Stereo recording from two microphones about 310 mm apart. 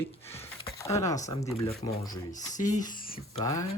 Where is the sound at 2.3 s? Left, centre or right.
Left.